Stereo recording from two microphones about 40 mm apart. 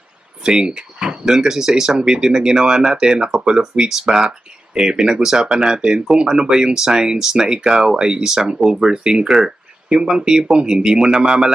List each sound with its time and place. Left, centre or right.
0.4 s speech: right